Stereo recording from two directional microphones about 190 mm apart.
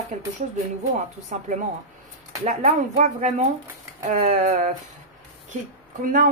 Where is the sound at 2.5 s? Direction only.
40° right (ahead or behind).